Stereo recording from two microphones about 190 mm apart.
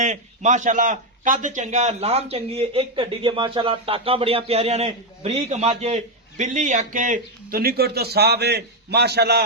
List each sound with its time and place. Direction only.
0.0 s a man's voice: 40° right (ahead or behind); by 9.4 s 60° right (ahead or behind)